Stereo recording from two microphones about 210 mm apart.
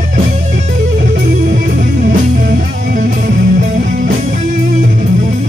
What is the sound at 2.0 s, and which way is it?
Music, 40° right (ahead or behind).